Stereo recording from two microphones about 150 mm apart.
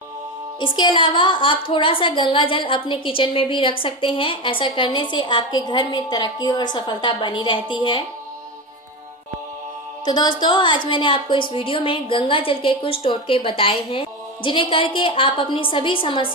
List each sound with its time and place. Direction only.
0.6 s a woman's voice: 30° left (ahead or behind)
10.0 s music: 30° left (ahead or behind)
10.4 s a woman's voice: 30° left (ahead or behind)